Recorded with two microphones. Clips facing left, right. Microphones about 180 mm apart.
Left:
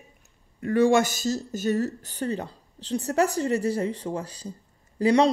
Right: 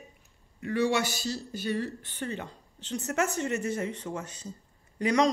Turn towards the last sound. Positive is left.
turn(degrees=30)  # may be behind; listen again after turning